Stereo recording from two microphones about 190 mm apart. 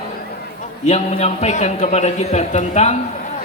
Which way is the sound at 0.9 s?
35° left (ahead or behind).